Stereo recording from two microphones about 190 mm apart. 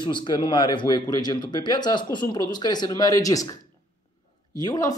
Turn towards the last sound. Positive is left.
turn(degrees=20)  # may be behind; listen again after turning